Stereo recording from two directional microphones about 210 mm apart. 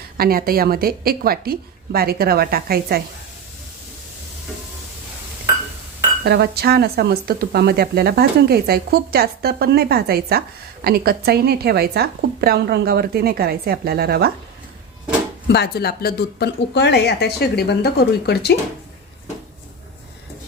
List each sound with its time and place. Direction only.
0.2 s speech: 45° right (ahead or behind)
6.2 s speech: 50° right (ahead or behind)
15.4 s speech: 50° left (ahead or behind)